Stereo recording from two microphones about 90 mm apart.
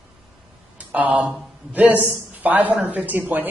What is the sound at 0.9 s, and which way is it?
A woman's voice, 15° right (ahead or behind).